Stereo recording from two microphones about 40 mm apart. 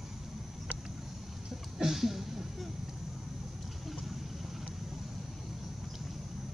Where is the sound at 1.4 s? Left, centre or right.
Centre.